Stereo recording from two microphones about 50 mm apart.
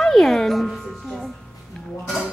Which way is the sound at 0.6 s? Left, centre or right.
Centre.